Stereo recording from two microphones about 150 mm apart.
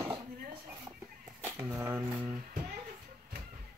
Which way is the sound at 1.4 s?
20° right (ahead or behind).